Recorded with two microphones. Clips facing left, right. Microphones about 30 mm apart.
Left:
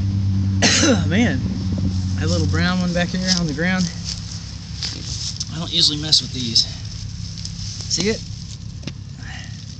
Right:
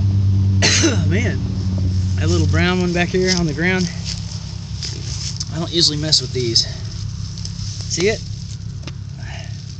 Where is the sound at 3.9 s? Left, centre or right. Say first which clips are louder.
Right 2 dB; right.